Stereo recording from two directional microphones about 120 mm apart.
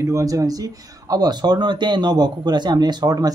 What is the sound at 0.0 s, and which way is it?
Speech, 30° right (ahead or behind).